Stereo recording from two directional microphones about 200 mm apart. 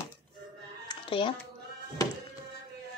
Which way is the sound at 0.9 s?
25° left (ahead or behind).